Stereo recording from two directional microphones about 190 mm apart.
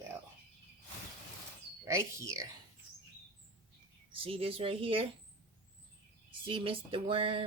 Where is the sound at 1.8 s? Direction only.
15° right (ahead or behind).